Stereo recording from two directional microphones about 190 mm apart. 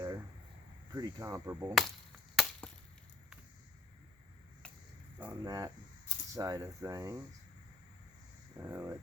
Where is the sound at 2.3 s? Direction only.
Centre (ahead or behind).